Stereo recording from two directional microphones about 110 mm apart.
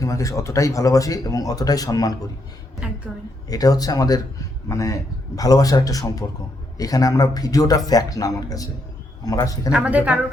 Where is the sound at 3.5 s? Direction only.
35° left (ahead or behind).